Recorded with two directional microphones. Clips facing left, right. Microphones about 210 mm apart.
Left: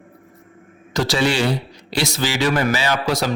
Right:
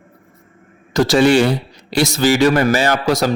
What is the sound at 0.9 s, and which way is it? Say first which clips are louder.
Speech: right 7 dB; 45° right (ahead or behind).